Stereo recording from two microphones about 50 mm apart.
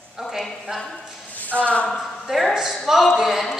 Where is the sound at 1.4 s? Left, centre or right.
Left.